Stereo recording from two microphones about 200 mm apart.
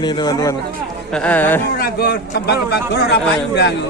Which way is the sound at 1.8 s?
50° left (ahead or behind).